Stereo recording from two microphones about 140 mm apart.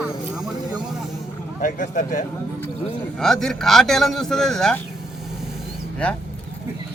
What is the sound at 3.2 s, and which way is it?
A man's voice, 5° left (ahead or behind).